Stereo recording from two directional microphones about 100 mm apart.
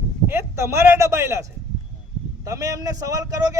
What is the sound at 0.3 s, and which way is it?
A man's voice, 25° right (ahead or behind).